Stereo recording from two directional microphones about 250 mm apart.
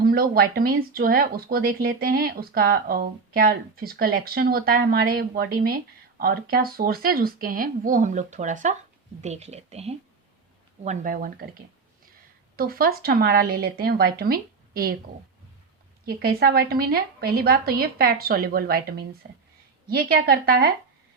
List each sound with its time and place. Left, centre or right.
0.0 s speech: right
12.5 s speech: right
16.0 s speech: right